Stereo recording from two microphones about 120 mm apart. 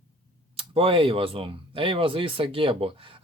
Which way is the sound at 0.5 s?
50° right (ahead or behind).